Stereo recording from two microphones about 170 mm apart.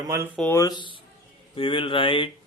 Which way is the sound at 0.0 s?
20° right (ahead or behind).